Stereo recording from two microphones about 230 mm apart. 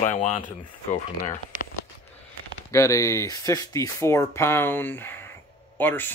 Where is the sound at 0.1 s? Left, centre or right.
Left.